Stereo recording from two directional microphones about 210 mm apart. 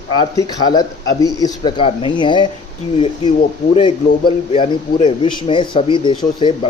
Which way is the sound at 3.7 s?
25° left (ahead or behind).